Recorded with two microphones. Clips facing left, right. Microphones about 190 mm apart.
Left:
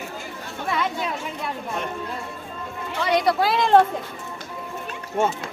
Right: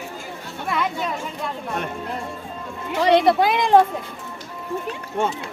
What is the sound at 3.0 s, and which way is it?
Speech, 30° right (ahead or behind).